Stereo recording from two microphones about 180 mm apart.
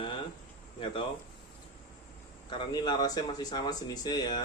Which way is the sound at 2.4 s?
25° left (ahead or behind).